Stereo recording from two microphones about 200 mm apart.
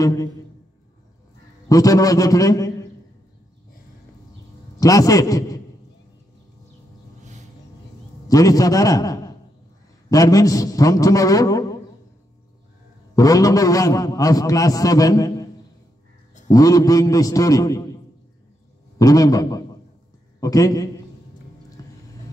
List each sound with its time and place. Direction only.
0.0 s a man's voice: 15° left (ahead or behind)
1.7 s a man's voice: 15° left (ahead or behind)
4.7 s a man's voice: 15° left (ahead or behind)
8.3 s a man's voice: 15° left (ahead or behind)
13.1 s a man's voice: 15° left (ahead or behind)
16.4 s a man's voice: 15° left (ahead or behind)
18.9 s a man's voice: 15° left (ahead or behind)